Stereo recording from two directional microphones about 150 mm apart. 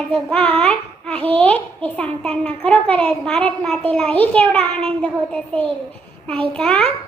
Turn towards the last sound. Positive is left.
turn(degrees=5)  # may be behind; listen again after turning